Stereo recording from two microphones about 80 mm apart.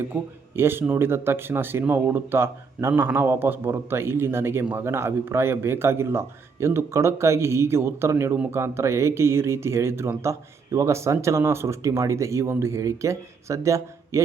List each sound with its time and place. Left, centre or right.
0.0 s a man's voice: right